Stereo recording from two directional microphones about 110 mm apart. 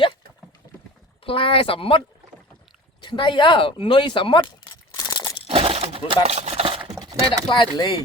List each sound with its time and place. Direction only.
1.2 s speech: 55° left (ahead or behind)
3.0 s speech: 45° left (ahead or behind)
4.9 s crunch: 35° left (ahead or behind)
5.5 s a sound: 60° right (ahead or behind)
6.2 s speech: 80° right; by 6.8 s 60° right (ahead or behind)
7.0 s a sound: 35° right (ahead or behind)
7.4 s speech: 45° left (ahead or behind)